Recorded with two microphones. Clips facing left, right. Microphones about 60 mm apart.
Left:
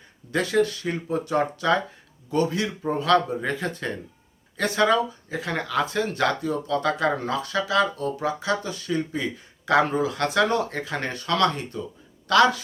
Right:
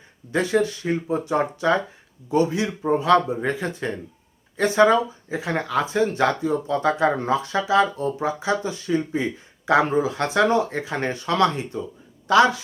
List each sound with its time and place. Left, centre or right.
0.3 s speech: right